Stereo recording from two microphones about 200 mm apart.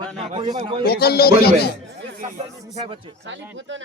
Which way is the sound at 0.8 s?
50° left (ahead or behind).